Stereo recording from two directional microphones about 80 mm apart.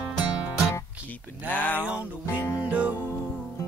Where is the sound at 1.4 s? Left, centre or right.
Left.